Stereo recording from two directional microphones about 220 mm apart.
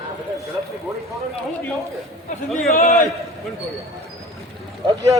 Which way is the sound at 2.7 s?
35° left (ahead or behind).